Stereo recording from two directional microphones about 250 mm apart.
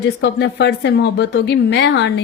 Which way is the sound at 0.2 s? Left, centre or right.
Left.